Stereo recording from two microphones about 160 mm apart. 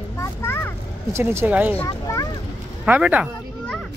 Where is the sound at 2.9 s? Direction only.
10° right (ahead or behind).